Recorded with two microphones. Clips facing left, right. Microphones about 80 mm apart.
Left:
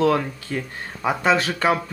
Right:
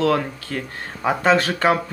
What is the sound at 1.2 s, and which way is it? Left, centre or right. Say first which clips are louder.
Speech: right 2 dB; centre.